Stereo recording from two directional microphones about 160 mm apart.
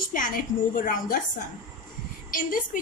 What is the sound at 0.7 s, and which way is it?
Speech, 55° left (ahead or behind).